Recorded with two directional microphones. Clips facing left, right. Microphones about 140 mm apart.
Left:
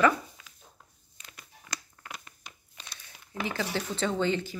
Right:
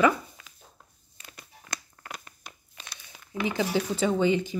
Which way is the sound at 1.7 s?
45° right (ahead or behind).